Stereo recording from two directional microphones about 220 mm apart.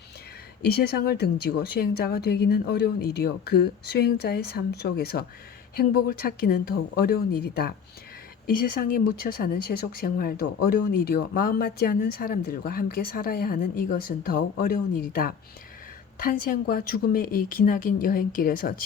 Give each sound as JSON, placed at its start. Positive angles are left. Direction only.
{"t": 0.6, "sound": "a woman's voice", "side_deg": 45}